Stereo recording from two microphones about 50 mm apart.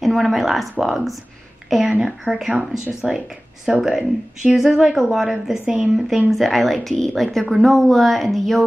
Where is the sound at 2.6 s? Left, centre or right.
Right.